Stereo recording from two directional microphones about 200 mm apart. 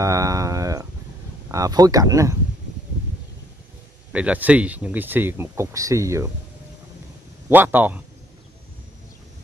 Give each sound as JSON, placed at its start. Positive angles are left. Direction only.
{"t": 0.0, "sound": "a sound", "side_deg": -15}
{"t": 1.5, "sound": "speech", "side_deg": -20}
{"t": 4.1, "sound": "speech", "side_deg": -5}
{"t": 7.4, "sound": "speech", "side_deg": -10}